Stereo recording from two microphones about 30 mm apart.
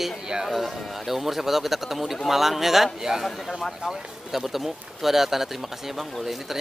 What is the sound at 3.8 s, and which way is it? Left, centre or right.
Speech, centre.